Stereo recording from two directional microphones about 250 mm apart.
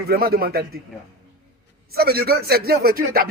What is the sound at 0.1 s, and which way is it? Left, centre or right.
Speech, right.